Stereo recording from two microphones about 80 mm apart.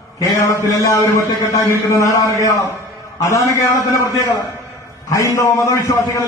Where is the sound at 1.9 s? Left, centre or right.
Left.